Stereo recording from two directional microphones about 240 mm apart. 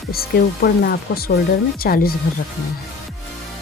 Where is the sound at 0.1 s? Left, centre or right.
Left.